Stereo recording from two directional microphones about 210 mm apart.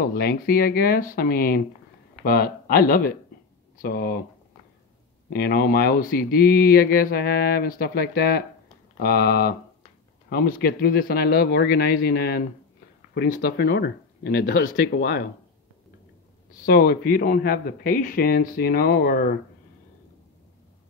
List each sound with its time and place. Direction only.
0.0 s speech: 45° left (ahead or behind)
5.3 s speech: 45° left (ahead or behind)
16.6 s speech: 45° left (ahead or behind)